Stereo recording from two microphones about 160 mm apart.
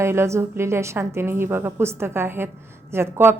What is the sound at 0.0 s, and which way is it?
A woman's voice, 15° right (ahead or behind).